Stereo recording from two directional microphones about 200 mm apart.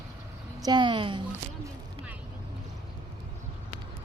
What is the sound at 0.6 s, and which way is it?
Speech, 20° right (ahead or behind).